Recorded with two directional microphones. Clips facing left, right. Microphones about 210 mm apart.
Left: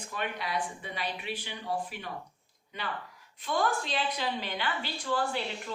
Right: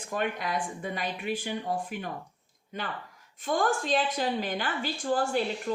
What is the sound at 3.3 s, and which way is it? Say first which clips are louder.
A woman's voice: right 3 dB; 45° right (ahead or behind).